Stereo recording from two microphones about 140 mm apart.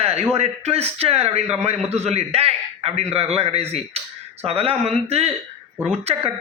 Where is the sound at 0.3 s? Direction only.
50° right (ahead or behind).